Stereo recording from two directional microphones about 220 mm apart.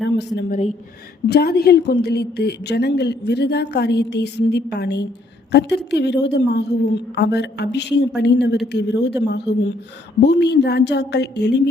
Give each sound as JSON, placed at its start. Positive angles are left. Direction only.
{"t": 0.0, "sound": "a woman's voice", "side_deg": 50}